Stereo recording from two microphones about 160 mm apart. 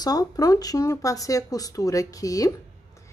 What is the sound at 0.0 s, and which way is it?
A woman's voice, 25° left (ahead or behind).